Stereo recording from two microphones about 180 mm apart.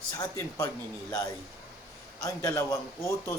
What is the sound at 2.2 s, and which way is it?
Speech, 15° left (ahead or behind).